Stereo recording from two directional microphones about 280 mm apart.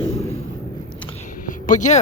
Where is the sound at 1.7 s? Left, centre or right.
Left.